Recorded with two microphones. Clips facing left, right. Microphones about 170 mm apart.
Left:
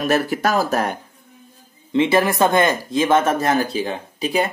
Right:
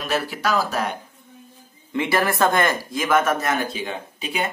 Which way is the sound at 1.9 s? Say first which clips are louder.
Left 5 dB; 20° left (ahead or behind).